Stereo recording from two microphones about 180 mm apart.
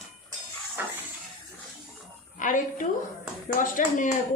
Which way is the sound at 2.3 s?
45° left (ahead or behind).